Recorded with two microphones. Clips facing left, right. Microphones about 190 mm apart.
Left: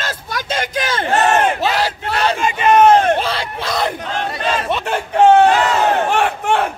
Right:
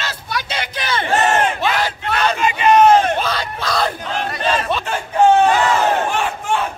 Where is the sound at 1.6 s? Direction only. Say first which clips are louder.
Left 1 dB; 35° left (ahead or behind).